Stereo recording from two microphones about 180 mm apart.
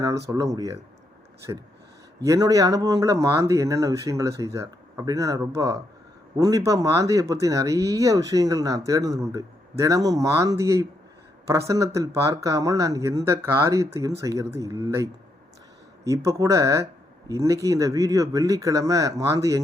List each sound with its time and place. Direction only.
0.3 s speech: 20° right (ahead or behind)
11.9 s speech: 15° right (ahead or behind)